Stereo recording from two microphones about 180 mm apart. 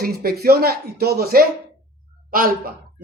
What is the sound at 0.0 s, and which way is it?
Speech, 55° right (ahead or behind).